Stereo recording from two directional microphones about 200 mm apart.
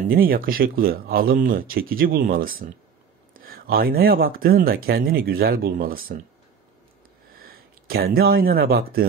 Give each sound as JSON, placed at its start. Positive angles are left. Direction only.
{"t": 0.0, "sound": "speech", "side_deg": -45}
{"t": 7.3, "sound": "speech", "side_deg": -50}